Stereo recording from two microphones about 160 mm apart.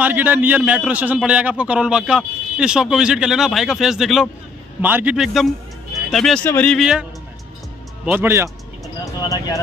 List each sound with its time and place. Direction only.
0.0 s a man's voice: 10° right (ahead or behind); by 6.8 s 10° left (ahead or behind)
6.8 s a man's voice: 5° right (ahead or behind)
9.2 s speech: 20° left (ahead or behind)